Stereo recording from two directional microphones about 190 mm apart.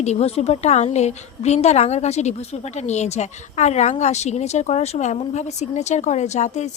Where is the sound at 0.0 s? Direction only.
35° left (ahead or behind).